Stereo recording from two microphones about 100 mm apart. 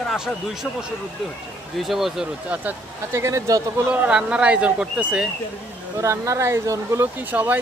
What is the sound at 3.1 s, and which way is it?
Speech, 30° right (ahead or behind).